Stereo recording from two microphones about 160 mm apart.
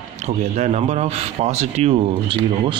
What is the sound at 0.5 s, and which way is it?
Speech, 45° right (ahead or behind).